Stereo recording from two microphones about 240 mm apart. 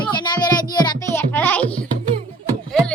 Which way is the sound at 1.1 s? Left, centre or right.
Centre.